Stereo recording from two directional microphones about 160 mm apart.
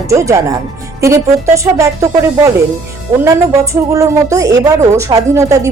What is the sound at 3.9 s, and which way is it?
A woman's voice, 20° right (ahead or behind).